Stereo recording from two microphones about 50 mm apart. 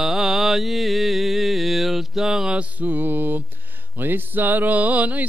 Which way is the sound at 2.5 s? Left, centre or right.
Right.